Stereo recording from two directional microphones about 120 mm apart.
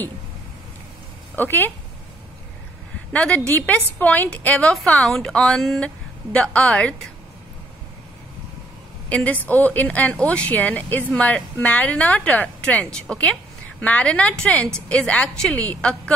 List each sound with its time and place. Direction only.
1.3 s a woman's voice: 15° left (ahead or behind)
3.1 s speech: 10° left (ahead or behind)
9.1 s a woman's voice: 15° left (ahead or behind)